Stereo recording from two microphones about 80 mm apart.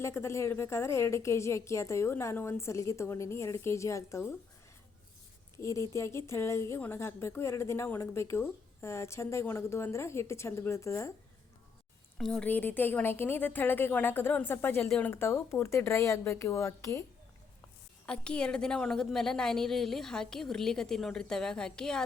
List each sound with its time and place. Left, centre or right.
0.0 s a woman's voice: left
5.5 s a woman's voice: left
12.1 s speech: centre
12.5 s a woman's voice: left
14.8 s a woman's voice: centre
15.1 s a woman's voice: left
18.0 s a woman's voice: centre